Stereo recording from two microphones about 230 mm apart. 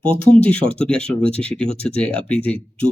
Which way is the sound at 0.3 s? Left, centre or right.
Centre.